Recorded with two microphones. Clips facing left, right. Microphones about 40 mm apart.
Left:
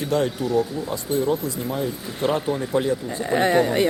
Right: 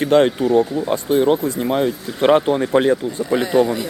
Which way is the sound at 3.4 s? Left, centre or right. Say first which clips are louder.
Left 1 dB; left.